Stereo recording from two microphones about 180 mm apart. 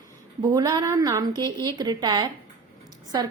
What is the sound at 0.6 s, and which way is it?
A woman's voice, 20° right (ahead or behind).